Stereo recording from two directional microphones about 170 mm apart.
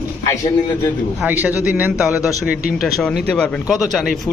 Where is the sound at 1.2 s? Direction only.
10° right (ahead or behind).